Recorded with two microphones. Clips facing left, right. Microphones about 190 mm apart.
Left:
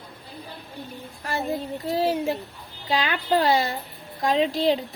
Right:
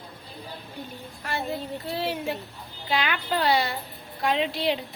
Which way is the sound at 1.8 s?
35° left (ahead or behind).